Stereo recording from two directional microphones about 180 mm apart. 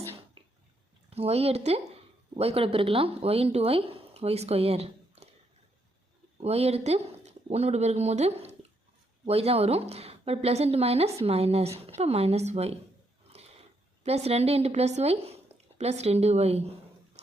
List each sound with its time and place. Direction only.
0.4 s a sound: 30° right (ahead or behind)
1.1 s speech: 35° right (ahead or behind)
6.4 s a woman's voice: 35° right (ahead or behind)